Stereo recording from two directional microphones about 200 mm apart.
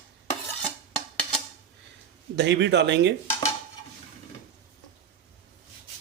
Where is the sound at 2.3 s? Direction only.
60° right (ahead or behind).